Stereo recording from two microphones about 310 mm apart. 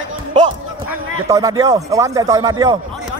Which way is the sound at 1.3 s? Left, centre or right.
Centre.